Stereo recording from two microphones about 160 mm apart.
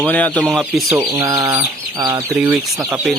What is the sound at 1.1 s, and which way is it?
Bird, 20° right (ahead or behind).